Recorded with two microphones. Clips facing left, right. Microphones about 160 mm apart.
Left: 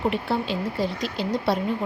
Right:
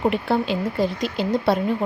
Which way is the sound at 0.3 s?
55° right (ahead or behind).